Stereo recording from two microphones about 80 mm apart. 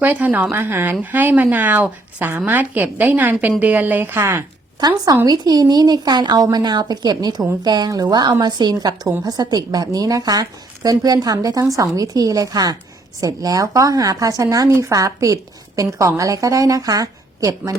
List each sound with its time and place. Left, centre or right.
0.0 s a woman's voice: centre
4.8 s a woman's voice: right